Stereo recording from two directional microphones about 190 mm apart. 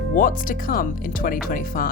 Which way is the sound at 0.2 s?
45° left (ahead or behind).